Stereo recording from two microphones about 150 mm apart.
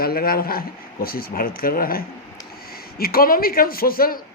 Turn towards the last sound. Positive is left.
turn(degrees=75)  # may be behind; listen again after turning